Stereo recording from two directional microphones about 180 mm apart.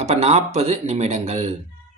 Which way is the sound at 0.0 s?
40° right (ahead or behind).